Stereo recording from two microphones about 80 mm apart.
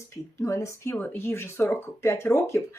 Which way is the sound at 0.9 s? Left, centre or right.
Left.